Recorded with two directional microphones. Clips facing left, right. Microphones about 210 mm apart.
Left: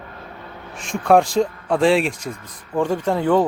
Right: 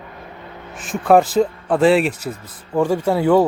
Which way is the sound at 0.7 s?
5° right (ahead or behind).